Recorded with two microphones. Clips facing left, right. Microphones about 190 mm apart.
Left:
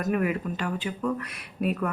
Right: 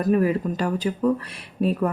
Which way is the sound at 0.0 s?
30° right (ahead or behind).